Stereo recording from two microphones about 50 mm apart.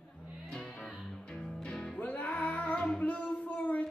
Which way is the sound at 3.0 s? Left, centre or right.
Left.